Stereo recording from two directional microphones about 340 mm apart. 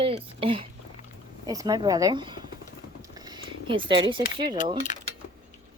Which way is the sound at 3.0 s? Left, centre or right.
Centre.